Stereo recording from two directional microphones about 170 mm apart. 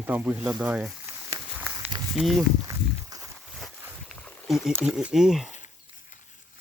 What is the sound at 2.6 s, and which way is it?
Walk, 20° right (ahead or behind).